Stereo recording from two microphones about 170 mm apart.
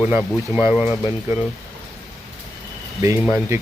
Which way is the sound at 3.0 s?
15° right (ahead or behind).